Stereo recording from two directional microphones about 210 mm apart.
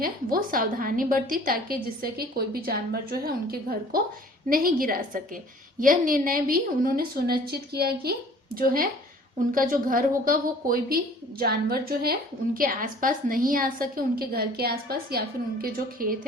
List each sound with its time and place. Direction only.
0.0 s a woman's voice: 45° right (ahead or behind)